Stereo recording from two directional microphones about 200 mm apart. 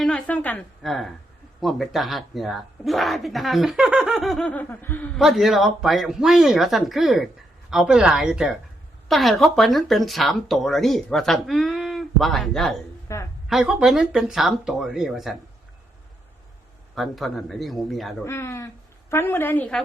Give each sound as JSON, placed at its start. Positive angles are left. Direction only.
{"t": 0.0, "sound": "speech", "side_deg": 5}
{"t": 13.1, "sound": "a woman's voice", "side_deg": 15}
{"t": 13.5, "sound": "speech", "side_deg": -5}
{"t": 16.9, "sound": "speech", "side_deg": 0}
{"t": 18.3, "sound": "a woman's voice", "side_deg": 10}